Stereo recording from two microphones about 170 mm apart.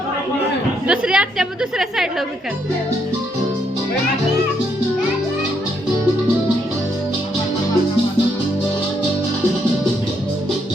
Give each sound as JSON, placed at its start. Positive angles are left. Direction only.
{"t": 0.9, "sound": "a woman's voice", "side_deg": -5}